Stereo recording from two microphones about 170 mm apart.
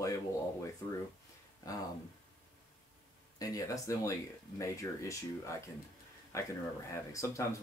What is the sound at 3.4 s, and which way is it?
Speech, 20° left (ahead or behind).